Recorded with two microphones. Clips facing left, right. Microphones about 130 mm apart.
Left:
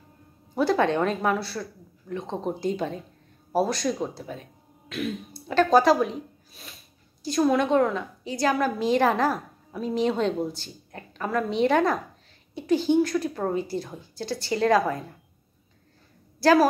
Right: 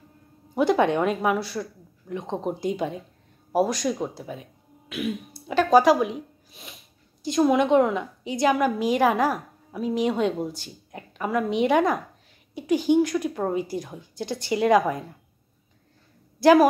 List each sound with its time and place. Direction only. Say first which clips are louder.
0.6 s a woman's voice: right 2 dB; 15° right (ahead or behind)
16.3 s speech: right 3 dB; 20° right (ahead or behind)